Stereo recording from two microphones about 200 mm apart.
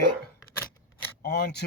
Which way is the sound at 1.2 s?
55° left (ahead or behind).